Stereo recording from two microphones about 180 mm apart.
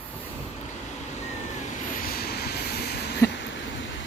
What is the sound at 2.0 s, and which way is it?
Vehicle, 60° left (ahead or behind).